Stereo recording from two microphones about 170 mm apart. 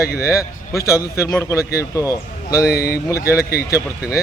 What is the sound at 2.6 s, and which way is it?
A man's voice, 65° left (ahead or behind).